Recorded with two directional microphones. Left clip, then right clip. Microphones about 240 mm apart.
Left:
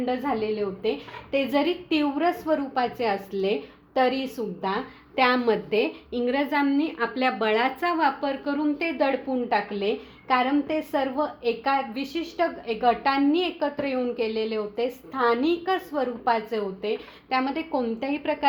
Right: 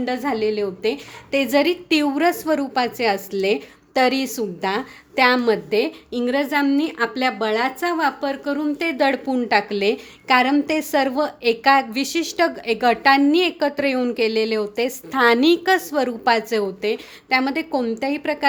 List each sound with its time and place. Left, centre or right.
0.0 s a woman's voice: right